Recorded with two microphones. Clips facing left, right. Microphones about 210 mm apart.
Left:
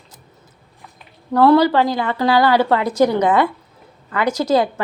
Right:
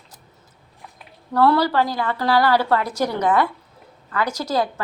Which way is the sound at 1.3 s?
20° left (ahead or behind).